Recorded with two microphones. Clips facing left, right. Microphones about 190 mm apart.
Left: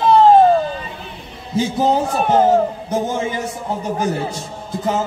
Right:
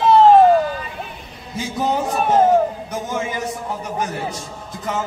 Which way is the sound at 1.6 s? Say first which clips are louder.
Left 5 dB; 30° left (ahead or behind).